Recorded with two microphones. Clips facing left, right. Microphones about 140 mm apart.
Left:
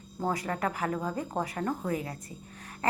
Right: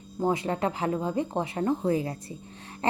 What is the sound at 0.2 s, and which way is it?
A woman's voice, 20° right (ahead or behind).